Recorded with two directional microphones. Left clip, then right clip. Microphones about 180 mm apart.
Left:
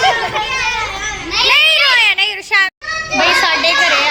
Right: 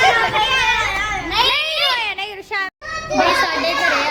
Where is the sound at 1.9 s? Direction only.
10° right (ahead or behind).